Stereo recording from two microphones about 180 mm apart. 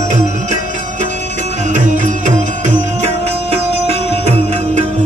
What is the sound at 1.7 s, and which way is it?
Music, 45° right (ahead or behind).